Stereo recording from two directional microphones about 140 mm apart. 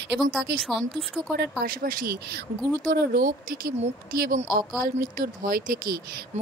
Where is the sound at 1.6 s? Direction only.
90° right.